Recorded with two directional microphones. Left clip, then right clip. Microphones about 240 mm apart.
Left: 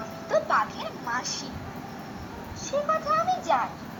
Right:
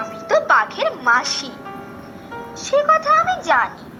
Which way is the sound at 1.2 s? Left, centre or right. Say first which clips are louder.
Right 10 dB; centre.